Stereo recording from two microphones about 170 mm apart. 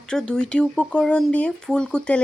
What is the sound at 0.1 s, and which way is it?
Speech, 5° left (ahead or behind).